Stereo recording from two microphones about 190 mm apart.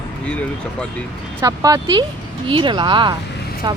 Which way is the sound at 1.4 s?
20° right (ahead or behind).